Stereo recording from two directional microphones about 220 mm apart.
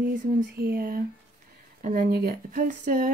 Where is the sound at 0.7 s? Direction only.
40° right (ahead or behind).